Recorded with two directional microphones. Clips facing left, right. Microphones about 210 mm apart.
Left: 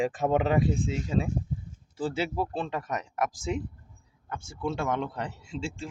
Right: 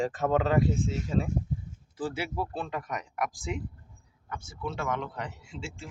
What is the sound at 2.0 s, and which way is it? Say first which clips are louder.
Speech: left 3 dB; 25° left (ahead or behind).